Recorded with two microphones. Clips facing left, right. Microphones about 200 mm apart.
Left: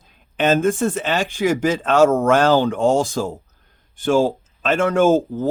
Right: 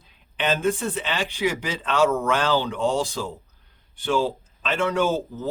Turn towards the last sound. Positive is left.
turn(degrees=45)  # may be behind; listen again after turning